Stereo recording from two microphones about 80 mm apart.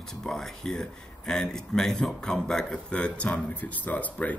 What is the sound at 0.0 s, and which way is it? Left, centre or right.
Speech, centre.